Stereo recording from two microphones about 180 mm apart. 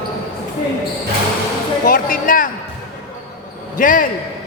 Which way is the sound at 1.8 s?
50° left (ahead or behind).